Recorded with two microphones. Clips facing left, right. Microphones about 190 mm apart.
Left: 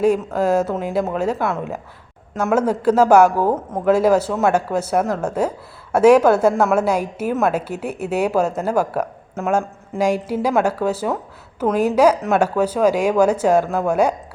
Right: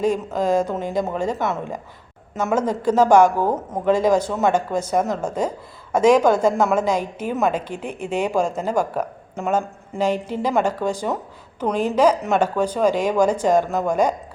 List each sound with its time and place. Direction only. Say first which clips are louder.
0.3 s a woman's voice: left 2 dB; 5° left (ahead or behind)